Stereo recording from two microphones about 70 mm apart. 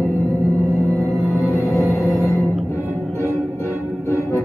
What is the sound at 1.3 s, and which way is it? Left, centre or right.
Music, left.